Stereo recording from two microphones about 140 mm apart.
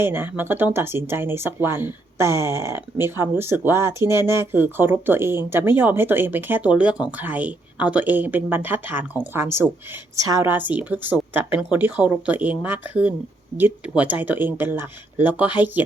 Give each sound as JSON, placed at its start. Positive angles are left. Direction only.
{"t": 0.0, "sound": "a woman's voice", "side_deg": -15}
{"t": 10.5, "sound": "speech", "side_deg": -10}